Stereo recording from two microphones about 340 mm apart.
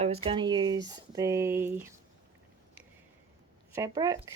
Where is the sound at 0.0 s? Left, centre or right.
Centre.